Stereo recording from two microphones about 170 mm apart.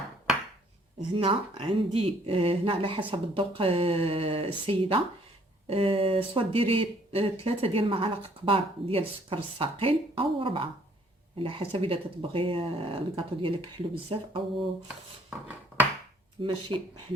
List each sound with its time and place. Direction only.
1.1 s speech: 35° right (ahead or behind)
15.3 s a sound: 10° right (ahead or behind)
16.4 s speech: 30° right (ahead or behind)